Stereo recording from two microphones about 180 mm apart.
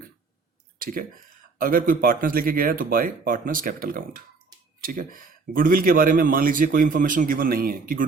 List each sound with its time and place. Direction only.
0.8 s speech: 50° right (ahead or behind)